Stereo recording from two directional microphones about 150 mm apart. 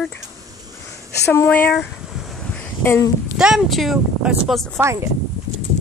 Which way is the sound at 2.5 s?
15° left (ahead or behind).